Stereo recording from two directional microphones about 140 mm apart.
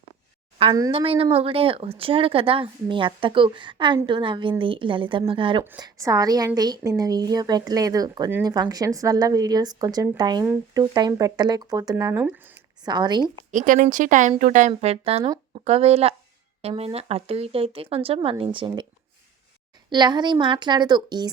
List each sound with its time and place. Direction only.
0.9 s speech: 40° right (ahead or behind)
5.8 s a woman's voice: 25° right (ahead or behind)
12.2 s speech: 10° right (ahead or behind)
12.8 s speech: 30° right (ahead or behind)
13.5 s speech: 65° right (ahead or behind)
14.7 s speech: 45° right (ahead or behind)
19.9 s speech: 30° right (ahead or behind)